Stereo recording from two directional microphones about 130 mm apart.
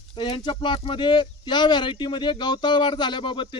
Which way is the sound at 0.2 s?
35° left (ahead or behind).